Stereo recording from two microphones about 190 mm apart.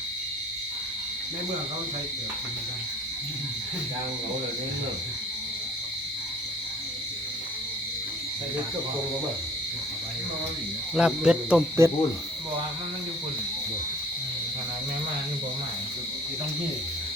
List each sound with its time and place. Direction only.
10.9 s owl: 5° right (ahead or behind)
11.8 s hoot: 15° right (ahead or behind)